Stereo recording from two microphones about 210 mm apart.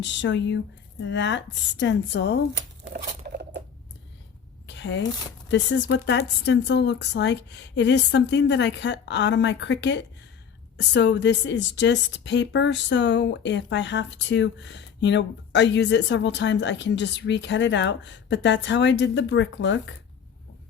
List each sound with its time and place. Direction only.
0.0 s a woman's voice: 60° left (ahead or behind)
2.9 s crumpling: 50° right (ahead or behind)
4.6 s a sound: 55° left (ahead or behind)
5.5 s a woman's voice: 60° left (ahead or behind)